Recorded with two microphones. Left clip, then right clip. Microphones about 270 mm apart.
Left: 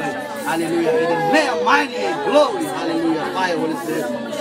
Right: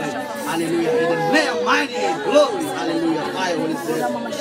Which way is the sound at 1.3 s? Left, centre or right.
Left.